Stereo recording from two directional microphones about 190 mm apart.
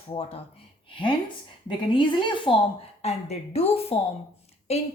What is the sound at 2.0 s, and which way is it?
A woman's voice, 25° left (ahead or behind).